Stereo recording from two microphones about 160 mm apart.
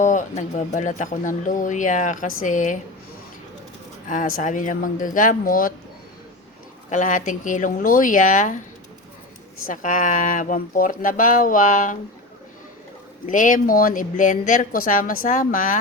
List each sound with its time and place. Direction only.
0.0 s speech: 50° left (ahead or behind)
4.1 s speech: 55° left (ahead or behind)
6.9 s speech: 50° left (ahead or behind)
9.8 s speech: 50° left (ahead or behind)
13.2 s speech: 55° left (ahead or behind)